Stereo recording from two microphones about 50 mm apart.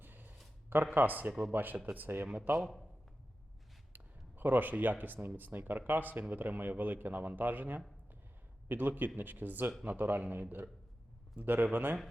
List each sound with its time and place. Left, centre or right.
0.0 s a sound: right
0.9 s a man's voice: right
1.3 s speech: centre
1.5 s a man's voice: right
2.6 s speech: centre
3.9 s a man's voice: right